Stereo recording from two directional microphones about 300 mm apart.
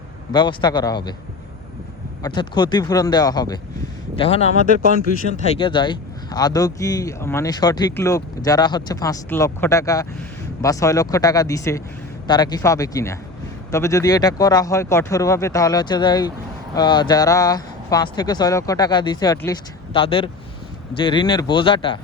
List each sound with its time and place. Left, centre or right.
0.3 s speech: centre
2.2 s speech: centre
5.5 s speech: centre